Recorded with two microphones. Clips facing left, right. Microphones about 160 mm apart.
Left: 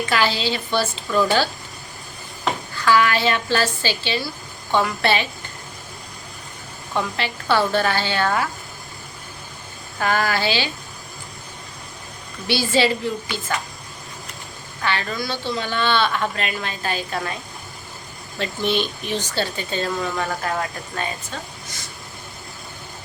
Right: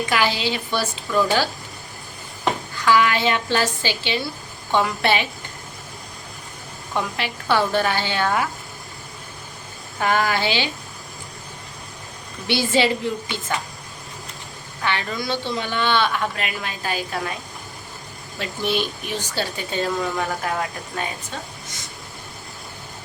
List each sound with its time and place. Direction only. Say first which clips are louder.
0.0 s a woman's voice: even; 15° right (ahead or behind)
6.9 s speech: left 1 dB; 15° right (ahead or behind)
10.0 s speech: even; 20° right (ahead or behind)
12.5 s a woman's voice: even; 20° right (ahead or behind)
14.8 s speech: even; 20° right (ahead or behind)
18.3 s speech: left 2 dB; 5° right (ahead or behind)